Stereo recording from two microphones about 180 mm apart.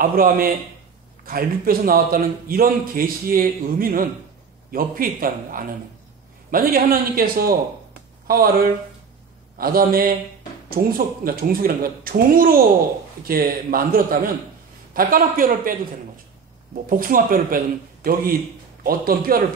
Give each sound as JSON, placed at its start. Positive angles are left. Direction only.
{"t": 0.0, "sound": "a man's voice", "side_deg": -55}
{"t": 16.9, "sound": "a man's voice", "side_deg": -50}
{"t": 18.9, "sound": "a man's voice", "side_deg": -55}